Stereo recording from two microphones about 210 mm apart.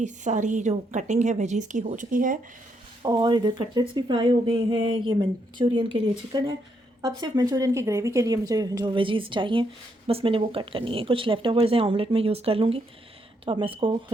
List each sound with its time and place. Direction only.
0.0 s a woman's voice: 35° right (ahead or behind)
3.0 s speech: 20° right (ahead or behind)